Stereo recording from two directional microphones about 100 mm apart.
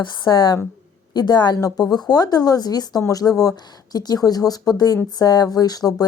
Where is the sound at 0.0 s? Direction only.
50° left (ahead or behind).